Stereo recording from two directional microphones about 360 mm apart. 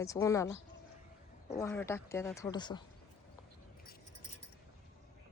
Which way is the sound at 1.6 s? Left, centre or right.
Centre.